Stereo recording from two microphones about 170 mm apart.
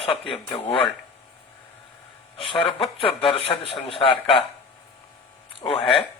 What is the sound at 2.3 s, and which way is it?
A man's voice, 30° left (ahead or behind).